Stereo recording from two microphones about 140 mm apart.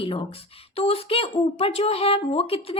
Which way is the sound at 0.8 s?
45° left (ahead or behind).